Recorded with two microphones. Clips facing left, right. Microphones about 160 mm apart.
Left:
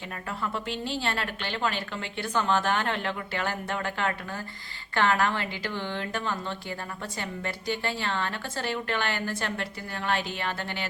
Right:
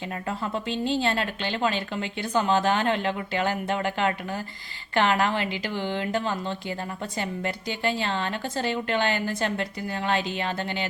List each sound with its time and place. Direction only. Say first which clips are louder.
0.3 s speech: right 2 dB; 20° right (ahead or behind)